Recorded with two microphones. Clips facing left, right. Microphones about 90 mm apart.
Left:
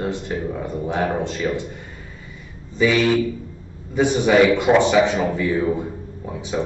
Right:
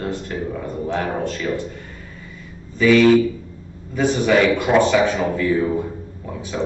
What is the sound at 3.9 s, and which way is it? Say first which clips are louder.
A man's voice: left 1 dB; 20° left (ahead or behind).